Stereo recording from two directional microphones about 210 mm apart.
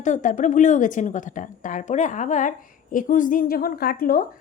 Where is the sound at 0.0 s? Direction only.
35° left (ahead or behind).